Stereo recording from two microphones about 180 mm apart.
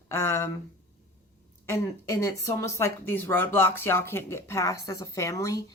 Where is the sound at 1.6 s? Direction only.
15° left (ahead or behind).